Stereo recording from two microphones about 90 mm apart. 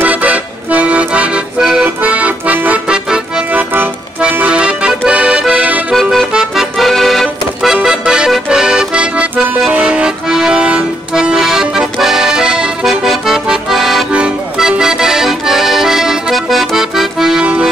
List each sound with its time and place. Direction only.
0.0 s accordion: 15° right (ahead or behind)
3.5 s music: 25° right (ahead or behind)
4.2 s accordion: 15° right (ahead or behind)